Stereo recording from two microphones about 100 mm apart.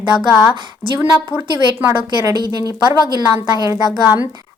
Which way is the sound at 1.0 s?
20° right (ahead or behind).